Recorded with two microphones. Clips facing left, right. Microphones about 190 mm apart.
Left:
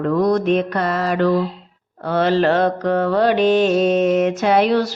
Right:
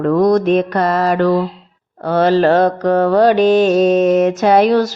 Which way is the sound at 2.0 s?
40° right (ahead or behind).